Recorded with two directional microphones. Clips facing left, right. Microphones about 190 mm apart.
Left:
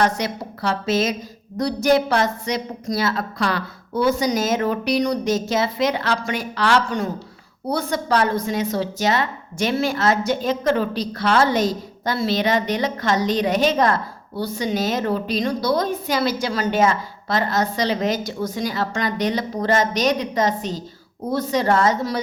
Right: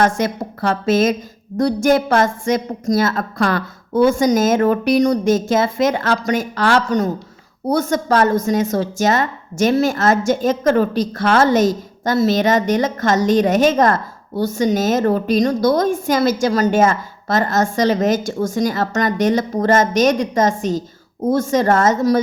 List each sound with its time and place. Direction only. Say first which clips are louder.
0.0 s a woman's voice: right 4 dB; 50° right (ahead or behind)